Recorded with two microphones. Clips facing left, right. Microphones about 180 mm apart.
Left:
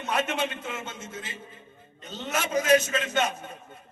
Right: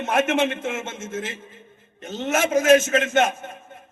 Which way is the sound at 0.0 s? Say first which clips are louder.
Right 7 dB; 50° right (ahead or behind).